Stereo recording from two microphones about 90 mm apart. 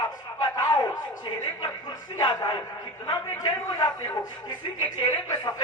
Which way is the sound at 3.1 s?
50° left (ahead or behind).